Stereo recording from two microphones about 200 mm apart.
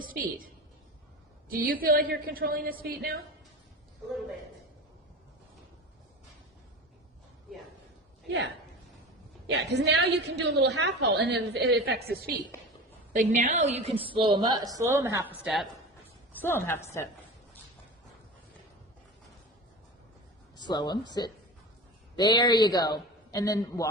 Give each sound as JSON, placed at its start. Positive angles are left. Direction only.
{"t": 0.0, "sound": "a woman's voice", "side_deg": -45}
{"t": 1.5, "sound": "a woman's voice", "side_deg": -45}
{"t": 9.5, "sound": "a woman's voice", "side_deg": -60}
{"t": 13.1, "sound": "a woman's voice", "side_deg": -40}
{"t": 16.3, "sound": "a woman's voice", "side_deg": 10}
{"t": 20.6, "sound": "a man's voice", "side_deg": 20}